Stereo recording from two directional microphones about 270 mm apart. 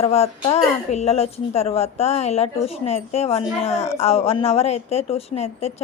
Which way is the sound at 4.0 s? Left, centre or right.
Left.